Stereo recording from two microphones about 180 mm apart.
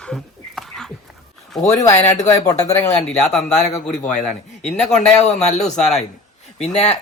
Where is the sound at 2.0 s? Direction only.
40° left (ahead or behind).